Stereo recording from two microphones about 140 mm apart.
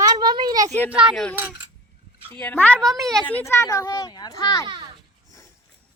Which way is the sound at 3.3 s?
20° left (ahead or behind).